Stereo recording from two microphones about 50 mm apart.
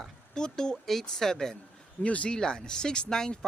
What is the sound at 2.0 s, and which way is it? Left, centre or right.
Speech, left.